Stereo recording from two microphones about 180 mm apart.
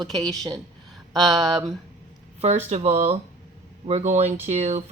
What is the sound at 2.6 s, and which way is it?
Speech, 40° right (ahead or behind).